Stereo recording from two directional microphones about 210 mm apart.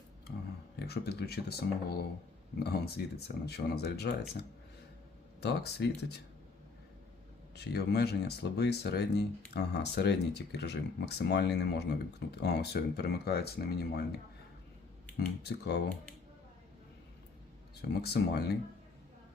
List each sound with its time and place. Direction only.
0.8 s speech: 50° left (ahead or behind)
5.4 s speech: 50° left (ahead or behind)
7.5 s speech: 50° left (ahead or behind)
15.4 s speech: 55° left (ahead or behind)
17.8 s speech: 50° left (ahead or behind)